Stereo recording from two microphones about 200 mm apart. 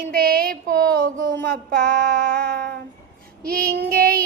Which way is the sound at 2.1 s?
55° right (ahead or behind).